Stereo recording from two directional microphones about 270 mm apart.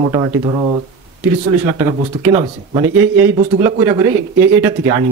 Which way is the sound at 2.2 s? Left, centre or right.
Centre.